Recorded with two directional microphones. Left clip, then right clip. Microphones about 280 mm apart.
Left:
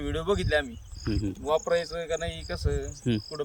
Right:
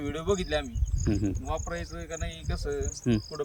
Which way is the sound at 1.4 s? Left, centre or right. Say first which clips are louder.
Left 9 dB; left.